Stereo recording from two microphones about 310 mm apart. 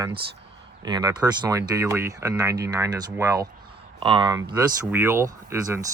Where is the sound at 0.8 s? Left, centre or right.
Centre.